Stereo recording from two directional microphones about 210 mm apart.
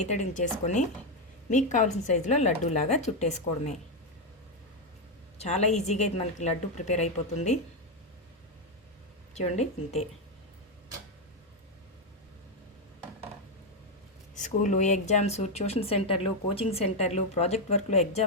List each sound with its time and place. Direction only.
0.0 s speech: 35° left (ahead or behind)
5.4 s speech: 30° left (ahead or behind)
9.3 s speech: 30° left (ahead or behind)
14.3 s speech: 35° left (ahead or behind)